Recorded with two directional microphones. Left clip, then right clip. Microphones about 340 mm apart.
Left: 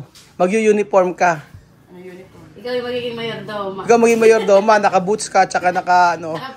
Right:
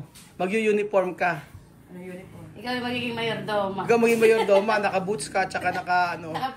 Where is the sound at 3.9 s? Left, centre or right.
Centre.